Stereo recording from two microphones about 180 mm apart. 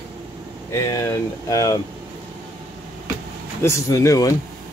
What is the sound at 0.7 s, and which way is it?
Speech, 15° left (ahead or behind).